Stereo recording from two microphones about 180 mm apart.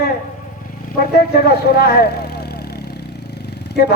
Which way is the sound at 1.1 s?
60° left (ahead or behind).